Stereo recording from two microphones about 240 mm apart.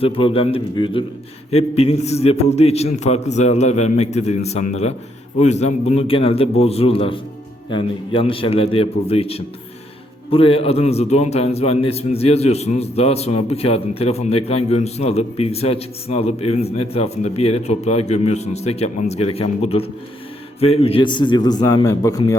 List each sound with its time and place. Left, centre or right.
0.0 s speech: left